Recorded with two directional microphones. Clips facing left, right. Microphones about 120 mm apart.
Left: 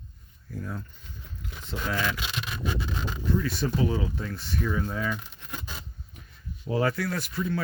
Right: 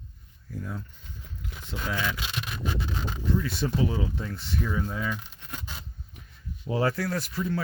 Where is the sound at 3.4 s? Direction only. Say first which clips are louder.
Left 1 dB; 25° right (ahead or behind).